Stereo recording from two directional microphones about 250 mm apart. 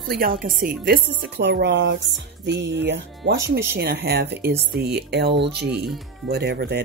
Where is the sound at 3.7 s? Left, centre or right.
Right.